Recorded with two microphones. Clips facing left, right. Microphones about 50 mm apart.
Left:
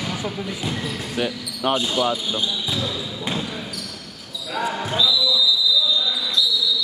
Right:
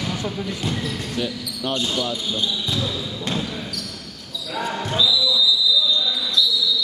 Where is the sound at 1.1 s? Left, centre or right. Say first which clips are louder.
Left 1 dB; left.